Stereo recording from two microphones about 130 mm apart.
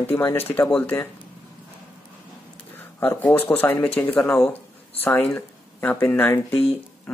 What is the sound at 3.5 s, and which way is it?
Speech, 15° left (ahead or behind).